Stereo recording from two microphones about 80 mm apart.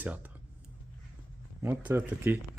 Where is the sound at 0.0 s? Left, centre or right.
Right.